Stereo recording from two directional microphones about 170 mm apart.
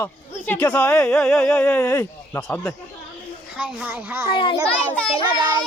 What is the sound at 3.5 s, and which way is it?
Speech, 5° right (ahead or behind).